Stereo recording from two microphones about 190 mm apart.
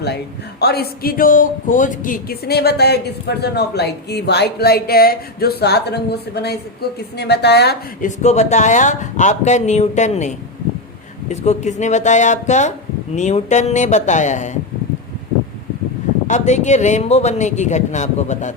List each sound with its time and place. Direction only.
0.6 s speech: 55° left (ahead or behind)
8.0 s speech: 35° left (ahead or behind)
16.2 s speech: 40° left (ahead or behind)